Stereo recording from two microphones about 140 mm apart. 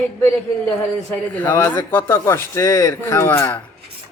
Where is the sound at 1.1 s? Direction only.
15° left (ahead or behind).